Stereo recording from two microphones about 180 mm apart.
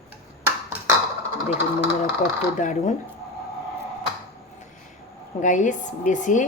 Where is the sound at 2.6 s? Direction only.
45° left (ahead or behind).